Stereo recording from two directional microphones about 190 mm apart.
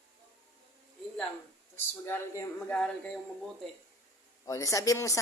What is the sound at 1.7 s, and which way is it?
A woman's voice, 10° left (ahead or behind).